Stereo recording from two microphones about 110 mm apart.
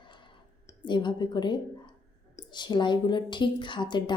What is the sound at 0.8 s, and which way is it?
A woman's voice, 45° left (ahead or behind).